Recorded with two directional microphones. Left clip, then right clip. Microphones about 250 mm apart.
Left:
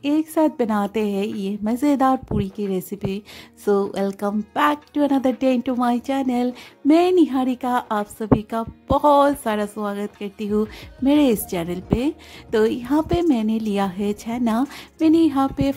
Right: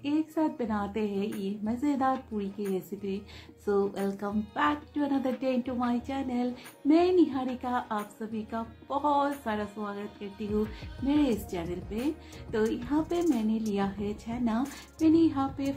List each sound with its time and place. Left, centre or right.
0.0 s speech: left